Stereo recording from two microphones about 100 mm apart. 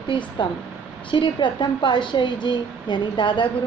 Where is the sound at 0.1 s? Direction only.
50° left (ahead or behind).